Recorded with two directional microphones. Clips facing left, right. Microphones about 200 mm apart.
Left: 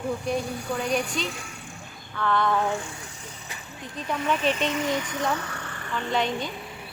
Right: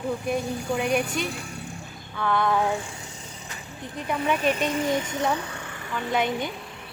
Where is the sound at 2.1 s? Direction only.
10° right (ahead or behind).